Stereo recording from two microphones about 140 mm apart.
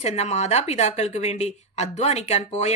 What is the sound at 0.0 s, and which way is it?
A woman's voice, 50° left (ahead or behind).